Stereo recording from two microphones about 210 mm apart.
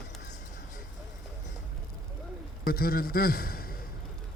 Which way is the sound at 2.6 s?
45° left (ahead or behind).